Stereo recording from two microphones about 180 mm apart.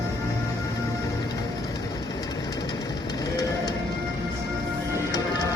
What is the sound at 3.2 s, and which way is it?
Music, 20° left (ahead or behind).